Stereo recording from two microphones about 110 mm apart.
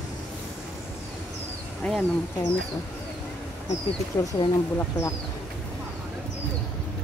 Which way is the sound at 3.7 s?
30° left (ahead or behind).